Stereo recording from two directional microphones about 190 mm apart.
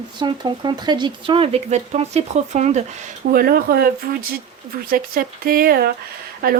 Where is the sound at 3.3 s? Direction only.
50° right (ahead or behind).